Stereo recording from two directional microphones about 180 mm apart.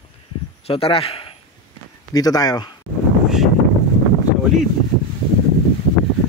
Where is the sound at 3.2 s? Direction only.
Centre (ahead or behind).